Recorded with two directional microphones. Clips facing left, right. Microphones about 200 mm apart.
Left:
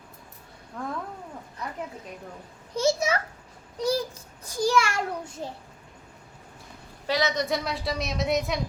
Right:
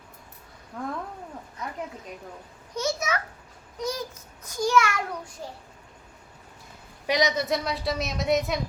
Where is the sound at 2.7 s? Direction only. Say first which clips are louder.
Left 4 dB; 30° left (ahead or behind).